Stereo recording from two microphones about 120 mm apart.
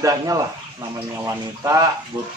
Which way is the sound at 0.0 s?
30° right (ahead or behind).